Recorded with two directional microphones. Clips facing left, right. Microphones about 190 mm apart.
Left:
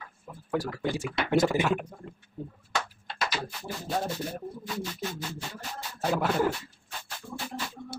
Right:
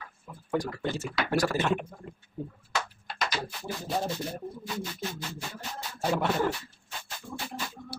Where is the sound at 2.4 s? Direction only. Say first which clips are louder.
Right 2 dB; 10° right (ahead or behind).